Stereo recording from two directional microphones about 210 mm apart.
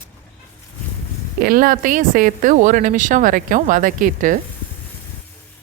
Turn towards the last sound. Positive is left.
turn(degrees=-40)  # may be behind; listen again after turning